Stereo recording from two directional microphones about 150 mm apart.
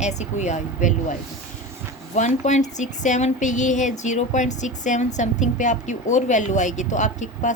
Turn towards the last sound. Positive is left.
turn(degrees=55)  # may be behind; listen again after turning